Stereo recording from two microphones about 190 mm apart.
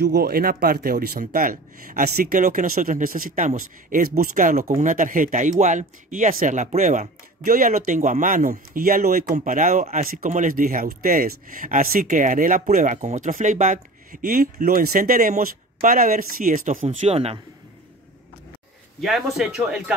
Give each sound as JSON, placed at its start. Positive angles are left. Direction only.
{"t": 0.0, "sound": "speech", "side_deg": -55}
{"t": 18.9, "sound": "speech", "side_deg": 0}